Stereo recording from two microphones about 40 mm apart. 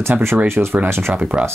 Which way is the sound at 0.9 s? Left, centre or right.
Right.